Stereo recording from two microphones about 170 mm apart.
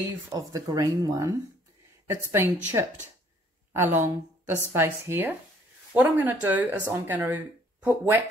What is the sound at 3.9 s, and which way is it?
Speech, 15° right (ahead or behind).